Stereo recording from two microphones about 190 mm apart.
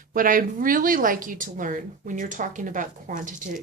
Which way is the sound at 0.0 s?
45° right (ahead or behind).